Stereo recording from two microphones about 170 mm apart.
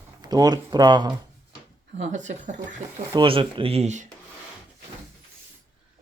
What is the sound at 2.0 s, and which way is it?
Speech, 45° right (ahead or behind).